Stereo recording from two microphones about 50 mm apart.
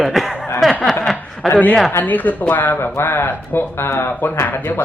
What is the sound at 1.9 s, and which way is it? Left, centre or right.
Speech, left.